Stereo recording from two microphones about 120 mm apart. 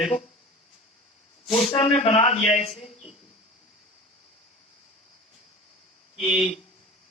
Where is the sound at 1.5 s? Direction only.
45° left (ahead or behind).